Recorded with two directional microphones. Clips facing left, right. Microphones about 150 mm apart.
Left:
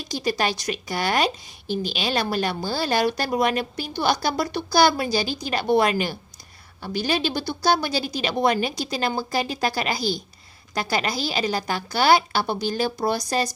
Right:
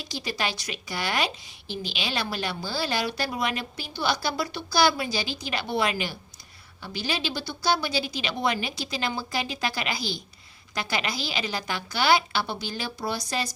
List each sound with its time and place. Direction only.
0.0 s a woman's voice: 45° left (ahead or behind)